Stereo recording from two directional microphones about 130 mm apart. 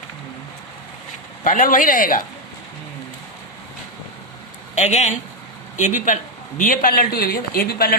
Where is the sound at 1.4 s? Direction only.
90° left.